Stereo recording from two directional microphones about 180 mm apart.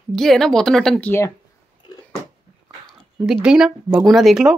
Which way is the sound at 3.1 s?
5° right (ahead or behind).